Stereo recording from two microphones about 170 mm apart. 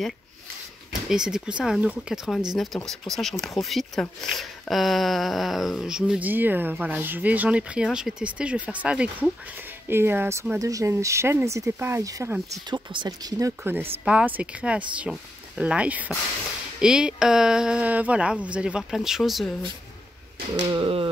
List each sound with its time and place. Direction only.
1.0 s speech: 5° right (ahead or behind); by 13.5 s 25° right (ahead or behind)
14.0 s speech: 10° right (ahead or behind)
20.7 s speech: 30° right (ahead or behind)